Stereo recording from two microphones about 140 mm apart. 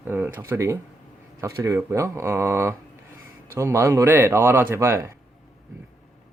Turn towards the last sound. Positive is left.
turn(degrees=-20)  # may be behind; listen again after turning